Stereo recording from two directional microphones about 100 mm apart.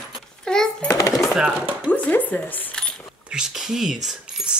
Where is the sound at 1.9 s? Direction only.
15° left (ahead or behind).